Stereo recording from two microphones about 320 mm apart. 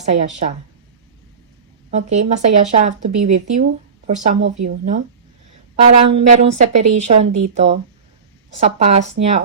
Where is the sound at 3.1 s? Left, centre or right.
Right.